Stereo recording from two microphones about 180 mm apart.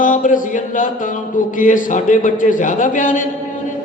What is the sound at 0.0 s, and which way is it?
A man's voice, 45° left (ahead or behind).